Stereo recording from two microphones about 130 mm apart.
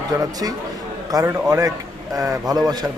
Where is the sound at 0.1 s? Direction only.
25° right (ahead or behind).